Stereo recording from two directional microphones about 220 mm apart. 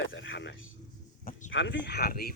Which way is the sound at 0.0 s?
60° left (ahead or behind).